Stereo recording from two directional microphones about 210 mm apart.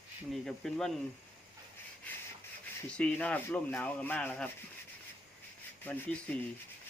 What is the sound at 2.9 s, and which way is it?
Speech, 5° left (ahead or behind).